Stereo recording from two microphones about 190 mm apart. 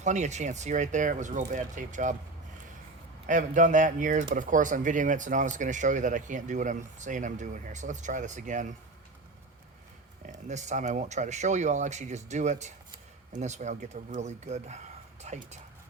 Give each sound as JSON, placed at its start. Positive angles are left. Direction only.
{"t": 0.0, "sound": "speech", "side_deg": -40}
{"t": 3.2, "sound": "speech", "side_deg": -40}
{"t": 10.2, "sound": "speech", "side_deg": -40}